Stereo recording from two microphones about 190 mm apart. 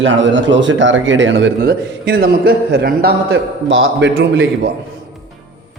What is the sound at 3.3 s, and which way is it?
Speech, 85° right.